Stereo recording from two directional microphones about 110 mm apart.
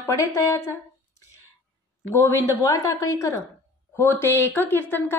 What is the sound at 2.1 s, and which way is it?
A woman's voice, 30° left (ahead or behind).